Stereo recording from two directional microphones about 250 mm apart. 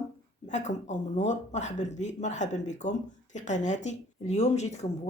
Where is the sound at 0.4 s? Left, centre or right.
Left.